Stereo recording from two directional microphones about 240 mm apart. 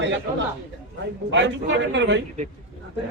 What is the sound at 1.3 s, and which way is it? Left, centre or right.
Speech, right.